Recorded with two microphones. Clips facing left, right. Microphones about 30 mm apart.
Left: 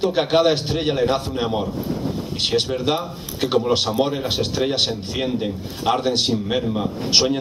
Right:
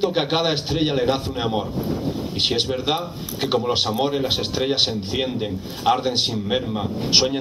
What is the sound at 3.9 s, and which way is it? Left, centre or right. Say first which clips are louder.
Speech: left 1 dB; centre.